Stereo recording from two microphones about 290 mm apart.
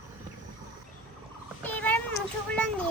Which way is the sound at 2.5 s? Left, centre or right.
Centre.